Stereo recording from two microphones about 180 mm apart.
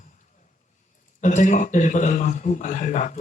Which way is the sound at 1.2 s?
45° left (ahead or behind).